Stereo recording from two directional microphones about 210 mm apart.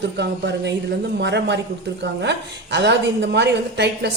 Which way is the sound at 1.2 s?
55° right (ahead or behind).